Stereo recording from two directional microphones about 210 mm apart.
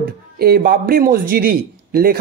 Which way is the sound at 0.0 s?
45° right (ahead or behind).